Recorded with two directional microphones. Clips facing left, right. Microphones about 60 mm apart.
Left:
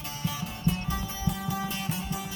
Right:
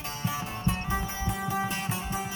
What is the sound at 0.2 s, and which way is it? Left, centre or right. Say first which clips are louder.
Music: right 1 dB; right.